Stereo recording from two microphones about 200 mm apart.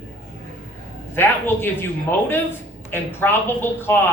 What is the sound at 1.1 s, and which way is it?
A woman's voice, 10° left (ahead or behind).